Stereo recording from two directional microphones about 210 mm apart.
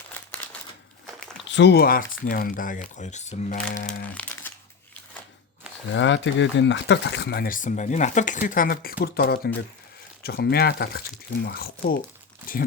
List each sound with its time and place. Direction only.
1.5 s speech: 60° left (ahead or behind); by 3.9 s 35° left (ahead or behind)
4.1 s crumpling: 10° left (ahead or behind)
5.9 s speech: 60° left (ahead or behind); by 12.6 s 40° left (ahead or behind)